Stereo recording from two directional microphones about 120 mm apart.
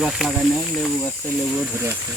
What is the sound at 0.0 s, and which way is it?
Speech, 5° right (ahead or behind).